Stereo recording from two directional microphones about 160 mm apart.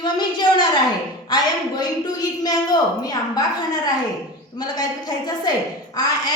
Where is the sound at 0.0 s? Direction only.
30° left (ahead or behind).